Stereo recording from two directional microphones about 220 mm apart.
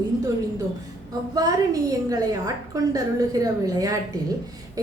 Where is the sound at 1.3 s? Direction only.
15° right (ahead or behind).